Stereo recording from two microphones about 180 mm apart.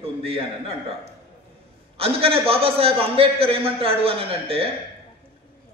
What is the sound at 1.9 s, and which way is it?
A man's voice, 30° right (ahead or behind).